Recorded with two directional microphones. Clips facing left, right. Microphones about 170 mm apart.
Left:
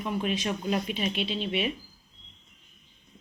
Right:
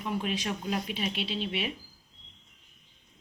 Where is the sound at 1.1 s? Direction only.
50° left (ahead or behind).